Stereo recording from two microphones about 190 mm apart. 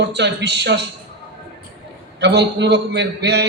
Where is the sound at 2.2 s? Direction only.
60° right (ahead or behind).